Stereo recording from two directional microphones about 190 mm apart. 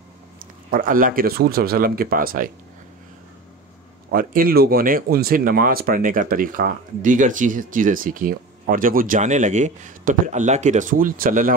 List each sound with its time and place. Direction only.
0.7 s speech: 50° right (ahead or behind)
4.1 s speech: 50° right (ahead or behind)